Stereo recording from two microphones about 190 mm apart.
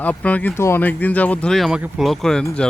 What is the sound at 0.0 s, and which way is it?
Speech, 5° left (ahead or behind).